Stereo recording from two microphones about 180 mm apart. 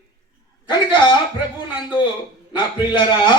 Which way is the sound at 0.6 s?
25° left (ahead or behind).